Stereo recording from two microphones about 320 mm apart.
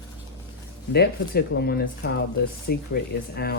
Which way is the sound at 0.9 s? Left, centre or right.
Left.